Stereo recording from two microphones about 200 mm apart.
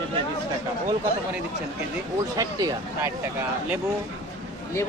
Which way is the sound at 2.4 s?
15° right (ahead or behind).